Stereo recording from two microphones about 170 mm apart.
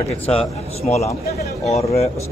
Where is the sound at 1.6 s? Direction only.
40° left (ahead or behind).